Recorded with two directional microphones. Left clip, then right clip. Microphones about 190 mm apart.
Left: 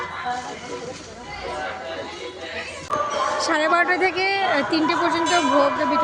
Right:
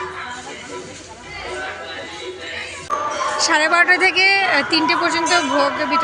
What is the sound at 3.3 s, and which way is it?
A woman's voice, 5° left (ahead or behind).